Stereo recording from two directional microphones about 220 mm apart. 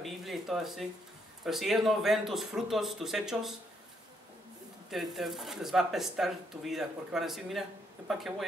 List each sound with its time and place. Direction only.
0.0 s a sound: centre (ahead or behind)
1.4 s speech: centre (ahead or behind)
4.9 s speech: centre (ahead or behind)